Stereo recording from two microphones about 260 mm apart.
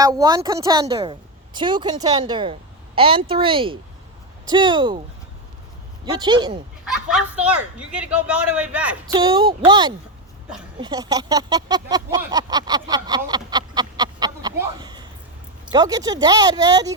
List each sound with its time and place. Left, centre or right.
0.0 s a woman's voice: centre
6.1 s a woman's voice: centre
6.8 s speech: centre
9.1 s a woman's voice: centre